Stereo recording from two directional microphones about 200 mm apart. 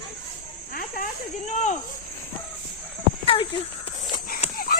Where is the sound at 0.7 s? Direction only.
45° left (ahead or behind).